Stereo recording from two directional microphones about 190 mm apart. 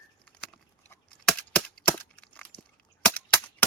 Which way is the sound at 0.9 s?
5° left (ahead or behind).